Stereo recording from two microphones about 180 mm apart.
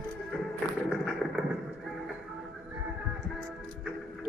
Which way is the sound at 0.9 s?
Centre (ahead or behind).